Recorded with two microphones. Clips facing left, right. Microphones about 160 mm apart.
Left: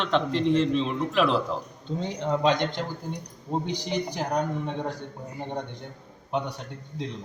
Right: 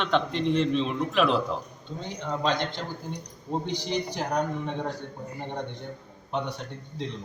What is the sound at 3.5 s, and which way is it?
A man's voice, 5° left (ahead or behind).